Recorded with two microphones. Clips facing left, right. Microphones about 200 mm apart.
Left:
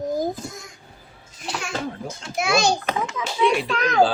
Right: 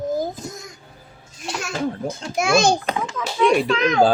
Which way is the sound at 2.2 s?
45° right (ahead or behind).